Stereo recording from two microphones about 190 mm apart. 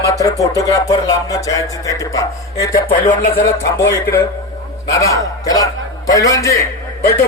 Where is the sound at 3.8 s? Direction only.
15° left (ahead or behind).